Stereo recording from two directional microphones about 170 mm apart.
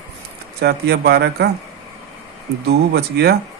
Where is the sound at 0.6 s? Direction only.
70° right (ahead or behind).